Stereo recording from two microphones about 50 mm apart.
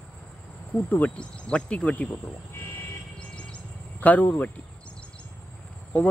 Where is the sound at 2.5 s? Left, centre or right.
Left.